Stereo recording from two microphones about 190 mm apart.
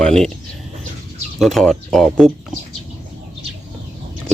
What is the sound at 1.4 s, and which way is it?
Speech, centre (ahead or behind).